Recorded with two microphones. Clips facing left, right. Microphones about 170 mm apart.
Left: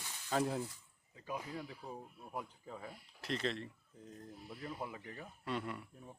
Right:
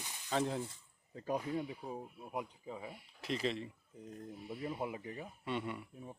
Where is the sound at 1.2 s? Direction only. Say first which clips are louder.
Right 6 dB; 40° right (ahead or behind).